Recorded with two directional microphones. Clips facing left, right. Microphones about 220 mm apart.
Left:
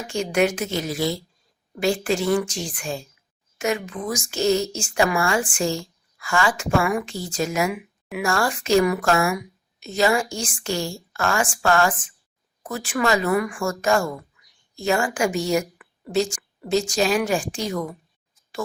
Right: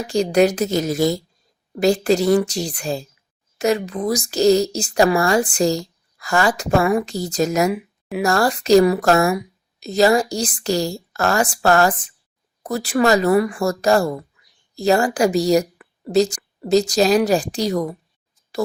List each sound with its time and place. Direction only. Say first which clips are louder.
0.0 s a woman's voice: right 5 dB; 35° right (ahead or behind)